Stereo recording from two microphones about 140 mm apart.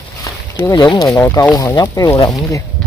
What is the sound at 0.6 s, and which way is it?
Speech, 30° left (ahead or behind).